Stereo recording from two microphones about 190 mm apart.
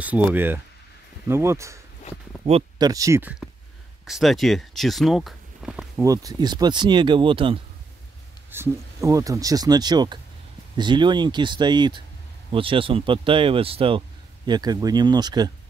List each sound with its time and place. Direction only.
0.0 s speech: 10° right (ahead or behind)
2.4 s speech: 35° right (ahead or behind)
2.8 s speech: 20° right (ahead or behind)
6.0 s speech: 20° right (ahead or behind)
8.5 s speech: 15° right (ahead or behind)